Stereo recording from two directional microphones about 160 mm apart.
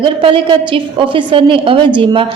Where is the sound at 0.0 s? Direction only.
30° right (ahead or behind).